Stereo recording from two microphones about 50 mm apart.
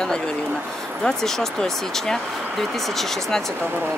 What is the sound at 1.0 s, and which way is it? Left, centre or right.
Speech, centre.